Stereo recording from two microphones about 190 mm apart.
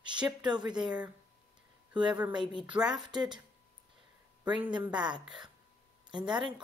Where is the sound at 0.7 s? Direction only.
5° right (ahead or behind).